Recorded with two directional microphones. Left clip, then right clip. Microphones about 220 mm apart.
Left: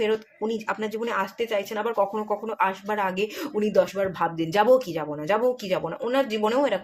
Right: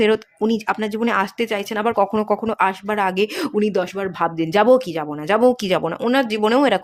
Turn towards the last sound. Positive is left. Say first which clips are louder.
# right 6 dB
turn(degrees=-50)  # may be behind; listen again after turning